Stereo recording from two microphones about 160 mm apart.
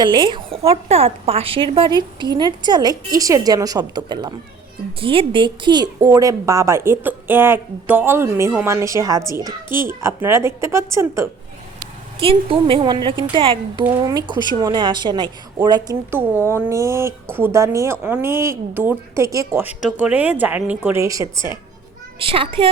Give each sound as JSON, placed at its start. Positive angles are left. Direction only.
{"t": 0.0, "sound": "a woman's voice", "side_deg": -30}
{"t": 12.2, "sound": "a woman's voice", "side_deg": -35}
{"t": 22.2, "sound": "a woman's voice", "side_deg": -35}